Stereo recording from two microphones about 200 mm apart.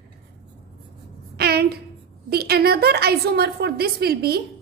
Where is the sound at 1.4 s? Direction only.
50° right (ahead or behind).